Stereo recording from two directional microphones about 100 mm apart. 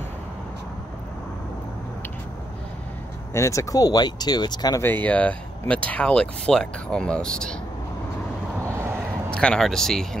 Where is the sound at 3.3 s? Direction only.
30° left (ahead or behind).